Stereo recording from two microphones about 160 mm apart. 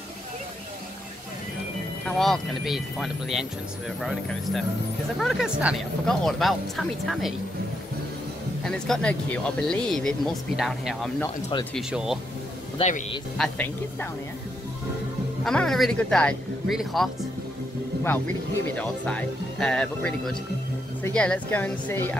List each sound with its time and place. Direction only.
2.0 s speech: 5° left (ahead or behind)
8.6 s speech: 5° left (ahead or behind)
12.7 s speech: 45° left (ahead or behind)
13.4 s speech: 10° left (ahead or behind)
15.4 s speech: 5° left (ahead or behind)
18.8 s speech: 5° left (ahead or behind)